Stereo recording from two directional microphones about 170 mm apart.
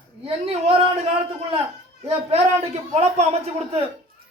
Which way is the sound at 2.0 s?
40° right (ahead or behind).